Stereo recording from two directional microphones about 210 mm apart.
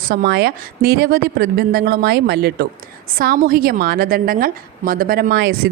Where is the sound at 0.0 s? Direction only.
45° right (ahead or behind).